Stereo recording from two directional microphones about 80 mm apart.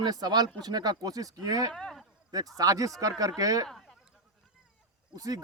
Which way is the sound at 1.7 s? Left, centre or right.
Centre.